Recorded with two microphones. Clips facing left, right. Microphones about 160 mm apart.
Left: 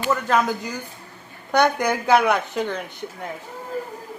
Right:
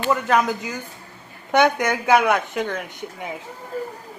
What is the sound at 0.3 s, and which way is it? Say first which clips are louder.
Speech: right 1 dB; centre (ahead or behind).